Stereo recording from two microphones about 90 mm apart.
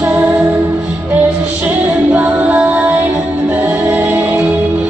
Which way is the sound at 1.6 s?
20° right (ahead or behind).